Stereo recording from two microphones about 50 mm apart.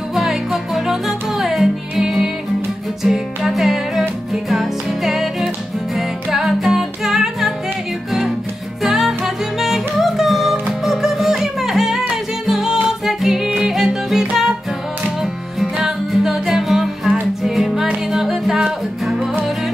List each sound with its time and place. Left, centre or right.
0.1 s music: centre
8.8 s music: centre
15.6 s music: centre